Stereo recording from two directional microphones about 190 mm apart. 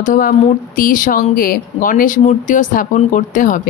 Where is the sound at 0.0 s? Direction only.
45° left (ahead or behind).